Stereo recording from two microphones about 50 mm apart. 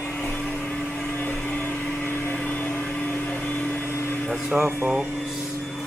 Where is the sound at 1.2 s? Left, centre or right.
Left.